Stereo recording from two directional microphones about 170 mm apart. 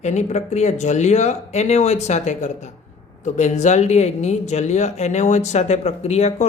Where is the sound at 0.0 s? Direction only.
45° left (ahead or behind).